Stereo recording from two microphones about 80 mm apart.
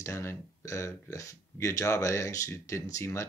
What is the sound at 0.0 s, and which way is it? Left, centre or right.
Speech, left.